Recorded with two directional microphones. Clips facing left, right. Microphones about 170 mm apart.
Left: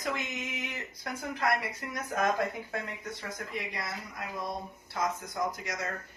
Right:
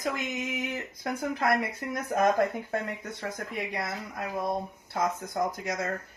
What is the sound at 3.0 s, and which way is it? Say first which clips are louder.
Speech: right 4 dB; 60° right (ahead or behind).